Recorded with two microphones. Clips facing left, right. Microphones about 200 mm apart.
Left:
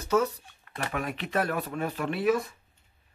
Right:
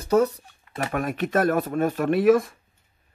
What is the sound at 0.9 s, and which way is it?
Speech, 50° right (ahead or behind).